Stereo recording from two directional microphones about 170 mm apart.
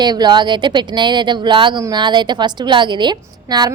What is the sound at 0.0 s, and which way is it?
A woman's voice, 25° right (ahead or behind).